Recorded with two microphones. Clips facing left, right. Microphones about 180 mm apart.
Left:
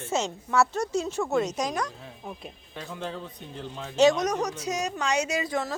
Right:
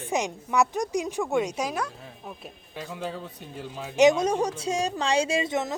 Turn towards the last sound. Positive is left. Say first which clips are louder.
# right 2 dB
turn(degrees=-20)  # may be behind; listen again after turning